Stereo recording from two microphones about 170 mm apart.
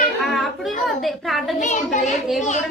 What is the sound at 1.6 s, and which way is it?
Speech, 45° left (ahead or behind).